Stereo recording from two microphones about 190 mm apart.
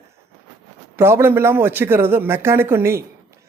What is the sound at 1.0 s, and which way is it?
Speech, 15° right (ahead or behind).